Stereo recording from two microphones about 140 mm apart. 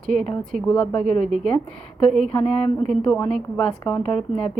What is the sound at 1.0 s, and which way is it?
A woman's voice, 75° right (ahead or behind).